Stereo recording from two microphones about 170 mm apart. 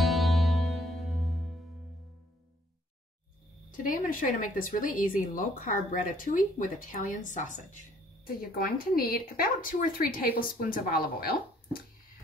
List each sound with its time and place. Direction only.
0.0 s music: centre (ahead or behind)
3.7 s speech: 55° left (ahead or behind)
8.4 s speech: 60° left (ahead or behind)